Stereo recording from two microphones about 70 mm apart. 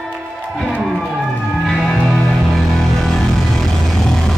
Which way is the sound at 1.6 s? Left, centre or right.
Centre.